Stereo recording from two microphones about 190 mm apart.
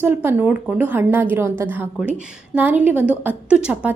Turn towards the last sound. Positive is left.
turn(degrees=-5)  # may be behind; listen again after turning